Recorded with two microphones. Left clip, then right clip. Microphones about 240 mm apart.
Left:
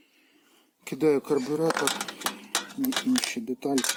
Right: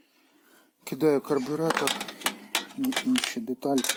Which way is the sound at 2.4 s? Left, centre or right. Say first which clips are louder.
Even; centre.